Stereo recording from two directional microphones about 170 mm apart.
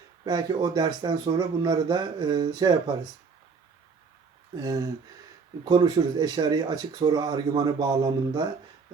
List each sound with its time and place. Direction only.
0.3 s speech: 25° right (ahead or behind)
5.6 s speech: 25° right (ahead or behind)